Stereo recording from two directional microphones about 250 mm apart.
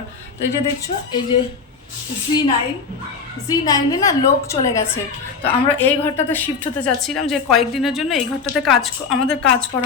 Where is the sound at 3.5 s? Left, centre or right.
Centre.